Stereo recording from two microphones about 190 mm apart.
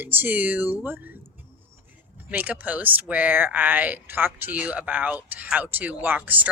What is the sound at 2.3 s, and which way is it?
Speech, 10° right (ahead or behind).